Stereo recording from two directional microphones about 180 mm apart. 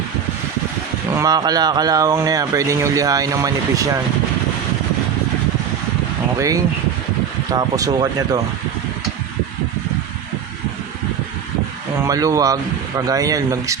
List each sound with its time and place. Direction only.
1.1 s speech: 20° right (ahead or behind)
7.5 s speech: 20° right (ahead or behind)
12.0 s speech: 20° right (ahead or behind)